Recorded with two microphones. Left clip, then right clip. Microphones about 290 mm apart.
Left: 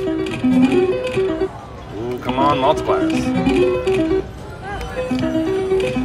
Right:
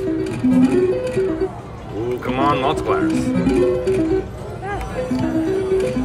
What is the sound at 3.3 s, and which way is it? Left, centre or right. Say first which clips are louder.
Speech: left 1 dB; centre.